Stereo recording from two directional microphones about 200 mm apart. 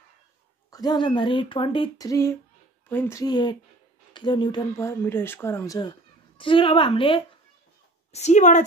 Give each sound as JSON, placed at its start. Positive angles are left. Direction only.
{"t": 0.7, "sound": "speech", "side_deg": 20}